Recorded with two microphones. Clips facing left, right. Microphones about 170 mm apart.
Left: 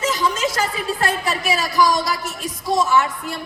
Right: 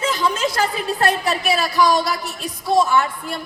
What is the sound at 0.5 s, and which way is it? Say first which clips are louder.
Speech: right 2 dB; 35° right (ahead or behind).